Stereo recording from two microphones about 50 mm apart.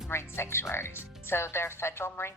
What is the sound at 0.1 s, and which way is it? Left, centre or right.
Speech, left.